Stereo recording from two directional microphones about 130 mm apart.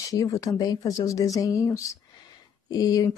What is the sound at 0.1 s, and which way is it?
Speech, 25° left (ahead or behind).